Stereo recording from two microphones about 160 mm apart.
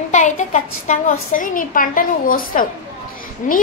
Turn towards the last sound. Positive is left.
turn(degrees=55)  # may be behind; listen again after turning